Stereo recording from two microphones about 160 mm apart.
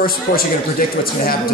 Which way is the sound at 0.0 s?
65° left (ahead or behind).